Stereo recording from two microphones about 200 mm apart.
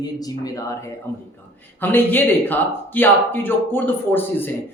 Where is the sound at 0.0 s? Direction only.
20° left (ahead or behind).